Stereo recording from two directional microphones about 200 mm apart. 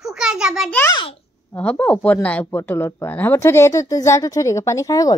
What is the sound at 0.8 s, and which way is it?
Speech, 20° left (ahead or behind).